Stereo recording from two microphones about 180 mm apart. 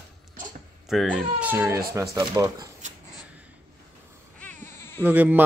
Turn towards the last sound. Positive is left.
turn(degrees=-10)  # may be behind; listen again after turning